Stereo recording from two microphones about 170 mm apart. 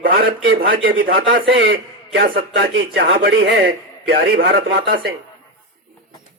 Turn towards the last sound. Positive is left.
turn(degrees=-75)  # may be behind; listen again after turning